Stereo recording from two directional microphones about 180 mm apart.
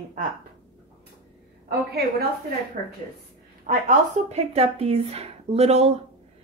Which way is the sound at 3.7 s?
40° right (ahead or behind).